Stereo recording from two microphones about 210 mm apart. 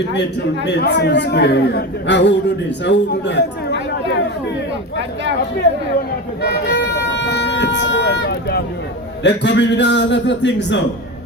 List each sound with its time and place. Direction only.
0.1 s a man's voice: 55° left (ahead or behind)
6.4 s music: 50° left (ahead or behind)
9.2 s a man's voice: 55° left (ahead or behind)